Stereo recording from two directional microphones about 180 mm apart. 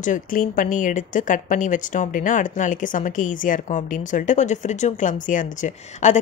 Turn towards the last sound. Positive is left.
turn(degrees=45)  # may be behind; listen again after turning